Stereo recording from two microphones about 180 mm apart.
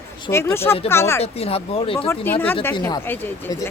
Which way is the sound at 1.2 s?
35° left (ahead or behind).